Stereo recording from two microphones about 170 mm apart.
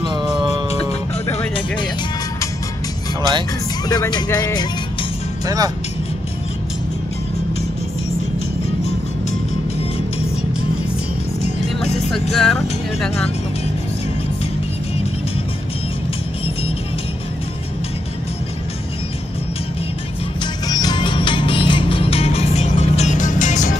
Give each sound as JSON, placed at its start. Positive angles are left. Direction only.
{"t": 0.0, "sound": "music", "side_deg": -25}
{"t": 3.9, "sound": "speech", "side_deg": 20}
{"t": 5.4, "sound": "speech", "side_deg": -20}
{"t": 9.8, "sound": "music", "side_deg": 35}
{"t": 11.4, "sound": "music", "side_deg": 40}
{"t": 12.1, "sound": "music", "side_deg": 0}
{"t": 20.6, "sound": "music", "side_deg": 25}